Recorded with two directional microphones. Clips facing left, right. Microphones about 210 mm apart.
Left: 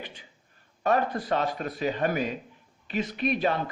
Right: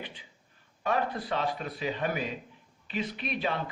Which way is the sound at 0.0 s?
45° left (ahead or behind).